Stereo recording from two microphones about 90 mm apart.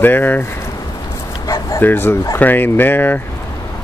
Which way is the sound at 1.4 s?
30° left (ahead or behind).